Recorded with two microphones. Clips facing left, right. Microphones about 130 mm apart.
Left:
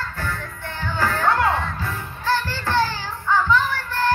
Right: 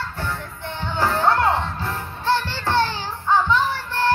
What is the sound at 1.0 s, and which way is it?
Music, 25° right (ahead or behind).